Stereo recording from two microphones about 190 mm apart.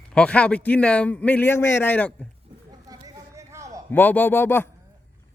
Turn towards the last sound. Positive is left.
turn(degrees=10)  # may be behind; listen again after turning